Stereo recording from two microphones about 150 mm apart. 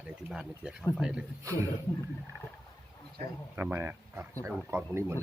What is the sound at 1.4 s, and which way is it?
Speech, 20° right (ahead or behind).